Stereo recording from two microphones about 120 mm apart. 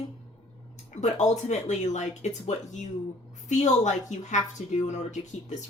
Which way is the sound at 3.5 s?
80° left.